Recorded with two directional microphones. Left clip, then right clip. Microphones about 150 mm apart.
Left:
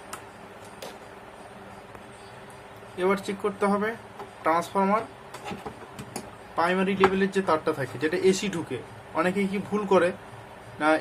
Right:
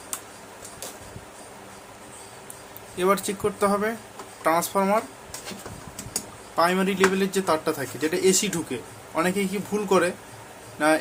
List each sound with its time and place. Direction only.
3.0 s speech: 20° right (ahead or behind)
6.6 s speech: 20° right (ahead or behind)